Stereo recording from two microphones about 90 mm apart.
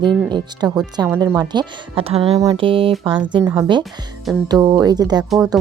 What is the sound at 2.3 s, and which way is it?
Speech, 45° right (ahead or behind).